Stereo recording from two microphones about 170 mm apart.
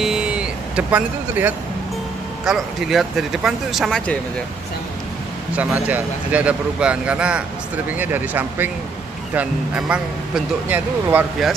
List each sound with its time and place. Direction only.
0.0 s vehicle: 5° right (ahead or behind)
2.4 s speech: centre (ahead or behind)
5.6 s speech: 10° right (ahead or behind)